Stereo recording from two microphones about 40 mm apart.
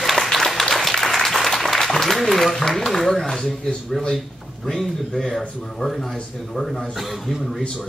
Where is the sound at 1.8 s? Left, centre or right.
Centre.